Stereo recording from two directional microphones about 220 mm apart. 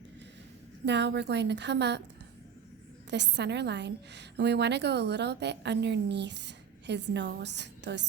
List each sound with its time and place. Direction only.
0.9 s a woman's voice: 50° right (ahead or behind)
3.1 s a woman's voice: 50° right (ahead or behind)